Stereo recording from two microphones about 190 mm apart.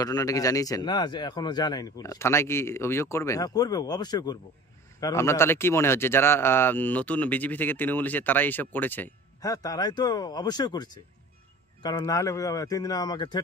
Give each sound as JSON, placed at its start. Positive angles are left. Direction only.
{"t": 0.0, "sound": "a man's voice", "side_deg": 20}